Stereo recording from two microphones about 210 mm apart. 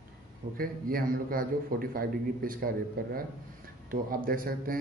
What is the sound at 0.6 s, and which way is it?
A man's voice, 45° right (ahead or behind).